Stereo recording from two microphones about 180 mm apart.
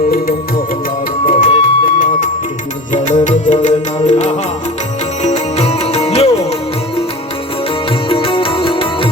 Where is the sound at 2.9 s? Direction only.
45° left (ahead or behind).